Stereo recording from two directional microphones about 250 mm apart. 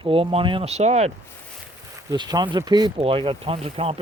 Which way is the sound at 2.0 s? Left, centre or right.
Centre.